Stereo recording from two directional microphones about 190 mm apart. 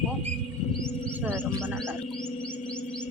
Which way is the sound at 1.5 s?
15° right (ahead or behind).